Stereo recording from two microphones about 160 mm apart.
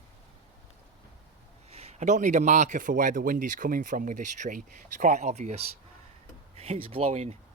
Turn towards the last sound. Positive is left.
turn(degrees=-45)  # may be behind; listen again after turning